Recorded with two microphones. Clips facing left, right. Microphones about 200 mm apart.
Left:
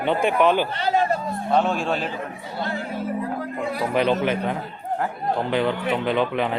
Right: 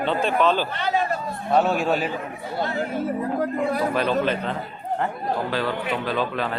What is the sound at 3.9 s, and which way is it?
A man's voice, 20° left (ahead or behind).